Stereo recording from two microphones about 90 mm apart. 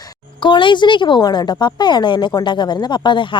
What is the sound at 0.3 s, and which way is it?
A woman's voice, 60° left (ahead or behind).